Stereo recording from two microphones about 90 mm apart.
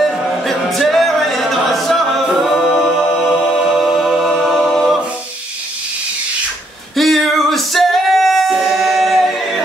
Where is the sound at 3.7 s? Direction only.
Centre (ahead or behind).